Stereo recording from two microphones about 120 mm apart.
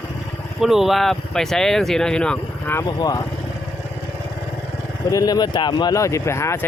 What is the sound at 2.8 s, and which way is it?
Speech, 35° left (ahead or behind).